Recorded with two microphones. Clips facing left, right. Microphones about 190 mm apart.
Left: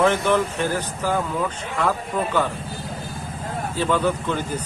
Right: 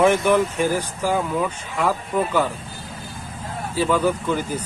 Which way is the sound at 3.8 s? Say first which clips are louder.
Right 2 dB; 10° right (ahead or behind).